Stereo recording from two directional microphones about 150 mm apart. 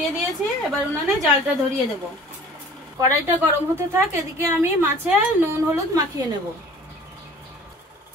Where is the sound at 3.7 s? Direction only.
15° right (ahead or behind).